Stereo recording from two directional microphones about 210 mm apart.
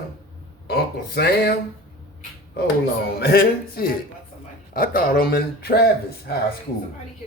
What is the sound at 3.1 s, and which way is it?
Speech, 45° left (ahead or behind).